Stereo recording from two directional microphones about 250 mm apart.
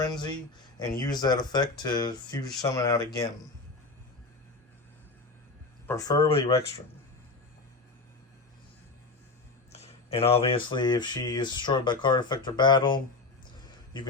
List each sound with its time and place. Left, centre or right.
0.8 s speech: centre
5.8 s speech: centre
9.7 s speech: left